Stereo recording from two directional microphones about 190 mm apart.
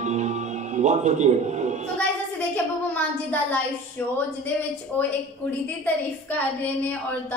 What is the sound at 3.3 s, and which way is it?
Child singing, 10° left (ahead or behind).